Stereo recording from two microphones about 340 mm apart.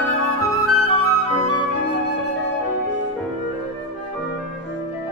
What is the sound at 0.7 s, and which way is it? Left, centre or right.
Flute, right.